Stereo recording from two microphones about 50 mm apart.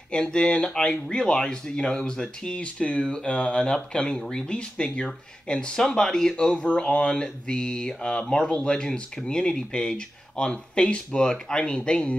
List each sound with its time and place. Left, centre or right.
0.1 s speech: centre